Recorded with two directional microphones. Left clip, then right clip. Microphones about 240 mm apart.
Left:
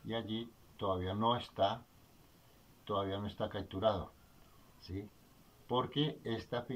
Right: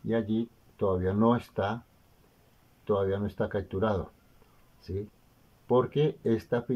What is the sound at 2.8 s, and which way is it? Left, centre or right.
Speech, right.